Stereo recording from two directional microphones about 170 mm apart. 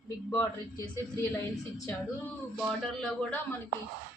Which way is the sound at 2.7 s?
5° left (ahead or behind).